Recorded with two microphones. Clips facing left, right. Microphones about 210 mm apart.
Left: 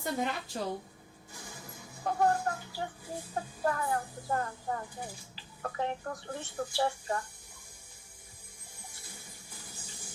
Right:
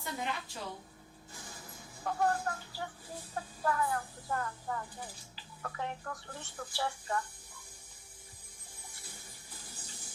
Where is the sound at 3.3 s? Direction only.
35° left (ahead or behind).